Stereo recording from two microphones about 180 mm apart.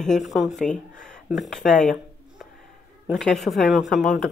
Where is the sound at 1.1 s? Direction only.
Centre (ahead or behind).